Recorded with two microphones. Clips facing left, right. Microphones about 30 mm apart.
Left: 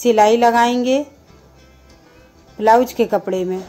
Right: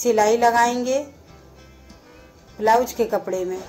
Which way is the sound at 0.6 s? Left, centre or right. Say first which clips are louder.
Left 4 dB; left.